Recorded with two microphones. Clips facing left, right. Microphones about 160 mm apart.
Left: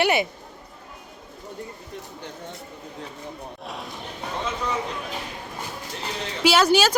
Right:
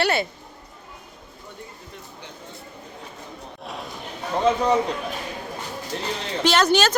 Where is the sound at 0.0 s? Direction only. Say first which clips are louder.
Left 1 dB; 15° left (ahead or behind).